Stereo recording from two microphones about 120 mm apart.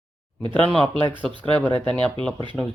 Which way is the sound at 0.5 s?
10° left (ahead or behind).